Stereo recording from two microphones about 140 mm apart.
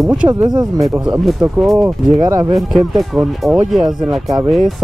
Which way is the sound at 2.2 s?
25° right (ahead or behind).